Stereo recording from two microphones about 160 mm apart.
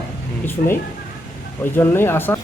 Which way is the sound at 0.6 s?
60° left (ahead or behind).